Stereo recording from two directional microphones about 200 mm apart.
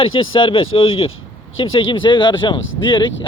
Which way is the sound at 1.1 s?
85° left.